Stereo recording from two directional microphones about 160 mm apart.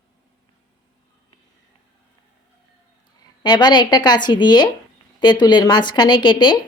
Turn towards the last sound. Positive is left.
turn(degrees=30)  # may be behind; listen again after turning